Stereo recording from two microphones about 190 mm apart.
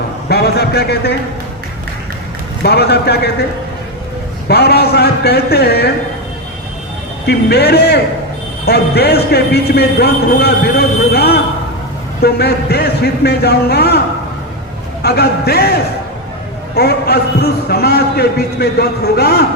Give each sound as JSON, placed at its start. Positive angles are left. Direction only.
{"t": 0.3, "sound": "speech", "side_deg": 55}
{"t": 2.6, "sound": "a man's voice", "side_deg": 55}
{"t": 4.4, "sound": "a man's voice", "side_deg": 60}
{"t": 7.3, "sound": "a man's voice", "side_deg": 60}
{"t": 15.0, "sound": "a man's voice", "side_deg": 55}